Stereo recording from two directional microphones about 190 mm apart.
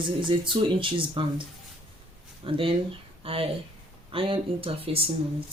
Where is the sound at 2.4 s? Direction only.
30° right (ahead or behind).